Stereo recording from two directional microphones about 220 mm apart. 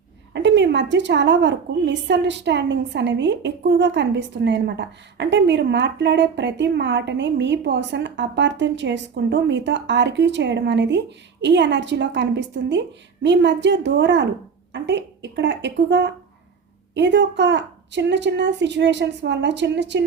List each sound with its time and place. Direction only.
0.3 s a woman's voice: 55° right (ahead or behind)